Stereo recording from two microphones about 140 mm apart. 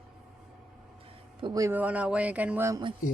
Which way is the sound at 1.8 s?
10° right (ahead or behind).